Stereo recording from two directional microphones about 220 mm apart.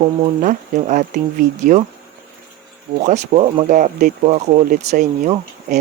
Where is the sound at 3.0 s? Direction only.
30° right (ahead or behind).